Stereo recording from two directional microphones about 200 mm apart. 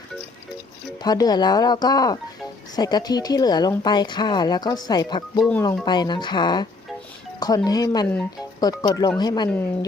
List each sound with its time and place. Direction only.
1.0 s speech: 20° left (ahead or behind)
5.4 s speech: 5° left (ahead or behind)
5.8 s speech: 20° left (ahead or behind)